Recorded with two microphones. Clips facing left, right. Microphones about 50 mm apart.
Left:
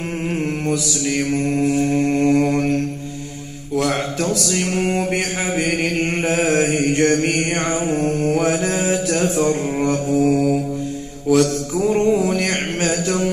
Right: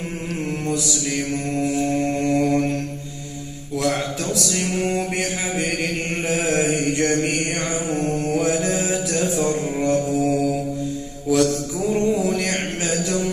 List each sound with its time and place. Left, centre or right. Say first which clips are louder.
0.7 s mantra: left 3 dB; left
4.6 s mantra: left 2 dB; left
6.2 s mantra: left 2 dB; left
8.0 s mantra: left 3 dB; left
8.4 s mantra: left 2 dB; left